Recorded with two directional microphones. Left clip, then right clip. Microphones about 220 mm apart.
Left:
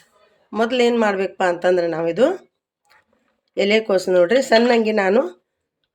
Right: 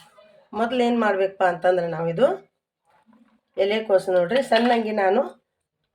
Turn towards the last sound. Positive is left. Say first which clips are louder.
# left 4 dB
turn(degrees=45)  # may be behind; listen again after turning